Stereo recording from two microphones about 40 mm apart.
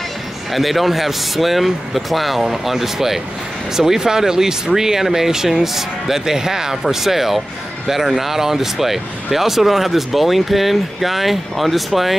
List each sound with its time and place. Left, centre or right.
0.5 s speech: centre